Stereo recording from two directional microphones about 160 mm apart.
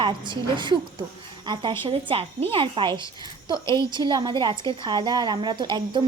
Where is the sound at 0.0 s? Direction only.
30° right (ahead or behind).